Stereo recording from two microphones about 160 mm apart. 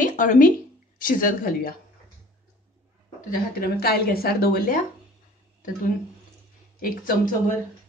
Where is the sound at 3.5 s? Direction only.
75° left (ahead or behind).